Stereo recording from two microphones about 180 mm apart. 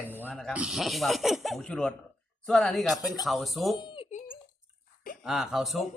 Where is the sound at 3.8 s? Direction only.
25° left (ahead or behind).